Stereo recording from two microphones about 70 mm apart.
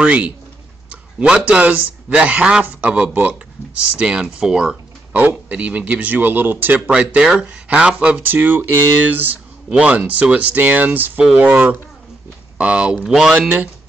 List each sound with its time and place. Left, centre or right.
0.0 s speech: centre
5.1 s speech: right
6.9 s speech: centre
8.2 s speech: right; by 13.4 s centre